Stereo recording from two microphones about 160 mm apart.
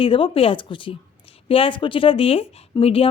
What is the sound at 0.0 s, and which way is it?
Speech, 35° left (ahead or behind).